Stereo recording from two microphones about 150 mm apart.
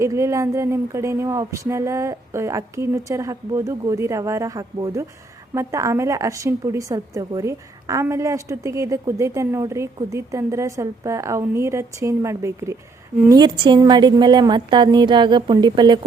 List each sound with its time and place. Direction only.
0.0 s a woman's voice: 20° right (ahead or behind)